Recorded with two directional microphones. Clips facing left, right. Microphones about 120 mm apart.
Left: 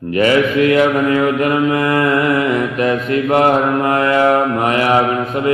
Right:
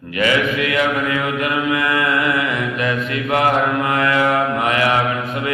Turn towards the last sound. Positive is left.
turn(degrees=35)  # may be behind; listen again after turning